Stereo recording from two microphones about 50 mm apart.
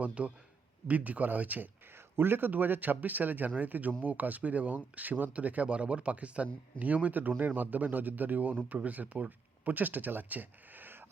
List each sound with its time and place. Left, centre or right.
0.0 s speech: right
2.1 s speech: right